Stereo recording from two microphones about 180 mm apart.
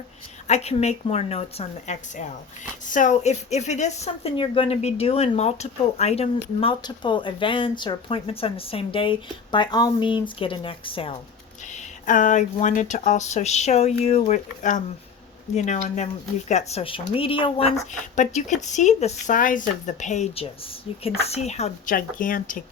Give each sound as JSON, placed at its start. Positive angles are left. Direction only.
{"t": 0.4, "sound": "a woman's voice", "side_deg": 35}
{"t": 11.7, "sound": "a woman's voice", "side_deg": 45}
{"t": 18.2, "sound": "a woman's voice", "side_deg": 40}